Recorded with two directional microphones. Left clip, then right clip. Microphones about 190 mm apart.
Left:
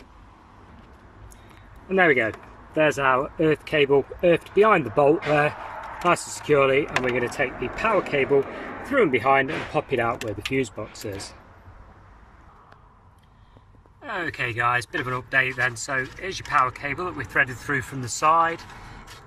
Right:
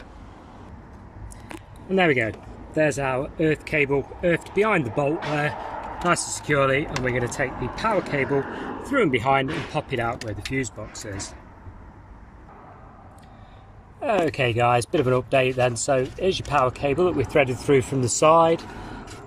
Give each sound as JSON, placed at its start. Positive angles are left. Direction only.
{"t": 1.9, "sound": "speech", "side_deg": 0}
{"t": 14.0, "sound": "speech", "side_deg": -25}